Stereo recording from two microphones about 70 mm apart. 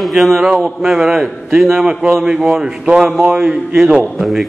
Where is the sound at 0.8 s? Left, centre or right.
Centre.